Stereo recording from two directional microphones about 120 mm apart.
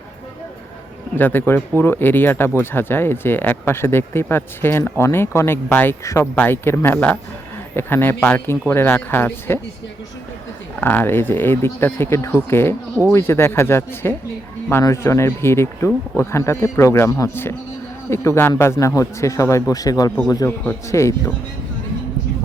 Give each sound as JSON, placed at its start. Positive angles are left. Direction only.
{"t": 1.1, "sound": "speech", "side_deg": 15}
{"t": 10.8, "sound": "speech", "side_deg": 15}